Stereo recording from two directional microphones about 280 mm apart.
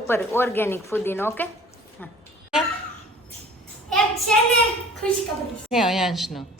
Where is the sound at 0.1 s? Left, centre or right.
Centre.